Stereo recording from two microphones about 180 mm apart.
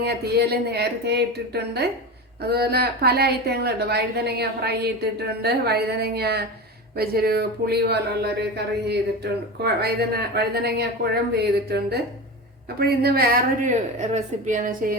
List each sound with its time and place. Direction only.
0.0 s a woman's voice: 65° right (ahead or behind)